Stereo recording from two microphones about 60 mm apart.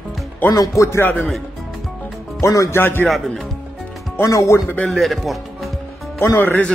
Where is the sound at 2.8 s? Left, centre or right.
Left.